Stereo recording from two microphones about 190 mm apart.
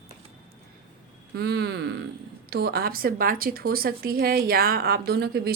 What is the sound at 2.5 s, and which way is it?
Speech, 55° right (ahead or behind).